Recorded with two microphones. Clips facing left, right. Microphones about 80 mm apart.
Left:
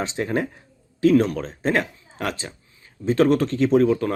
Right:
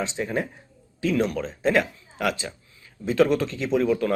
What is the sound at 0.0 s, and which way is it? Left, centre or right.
Speech, left.